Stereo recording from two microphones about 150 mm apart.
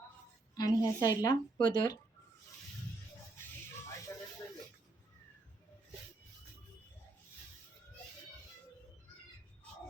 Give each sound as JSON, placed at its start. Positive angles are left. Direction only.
{"t": 0.5, "sound": "speech", "side_deg": 25}